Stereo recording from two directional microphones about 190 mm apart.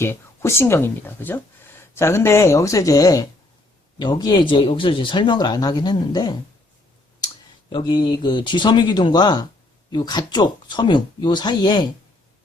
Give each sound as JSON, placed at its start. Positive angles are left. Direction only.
{"t": 0.0, "sound": "speech", "side_deg": 15}
{"t": 7.7, "sound": "speech", "side_deg": 25}